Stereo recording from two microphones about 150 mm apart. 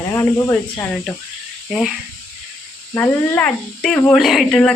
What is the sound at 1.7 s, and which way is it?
Speech, 5° right (ahead or behind).